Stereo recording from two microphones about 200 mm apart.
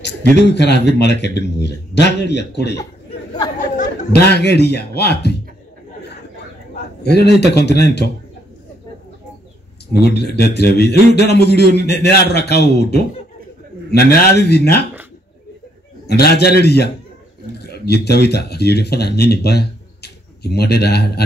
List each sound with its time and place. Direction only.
0.5 s a man's voice: 60° left (ahead or behind)
3.5 s chatter: 40° left (ahead or behind)
4.3 s a man's voice: 55° left (ahead or behind)
7.0 s a man's voice: 55° left (ahead or behind)
10.1 s a man's voice: 55° left (ahead or behind)
16.1 s a man's voice: 55° left (ahead or behind)